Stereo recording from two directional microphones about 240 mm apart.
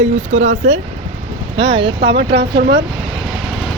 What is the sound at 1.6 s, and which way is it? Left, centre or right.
Speech, right.